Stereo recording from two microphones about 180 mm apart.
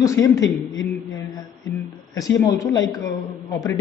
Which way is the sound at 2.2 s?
20° left (ahead or behind).